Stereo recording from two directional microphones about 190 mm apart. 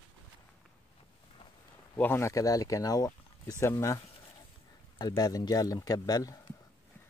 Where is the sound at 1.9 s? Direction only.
10° left (ahead or behind).